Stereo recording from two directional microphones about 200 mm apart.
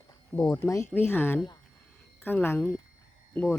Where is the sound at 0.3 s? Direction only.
20° left (ahead or behind).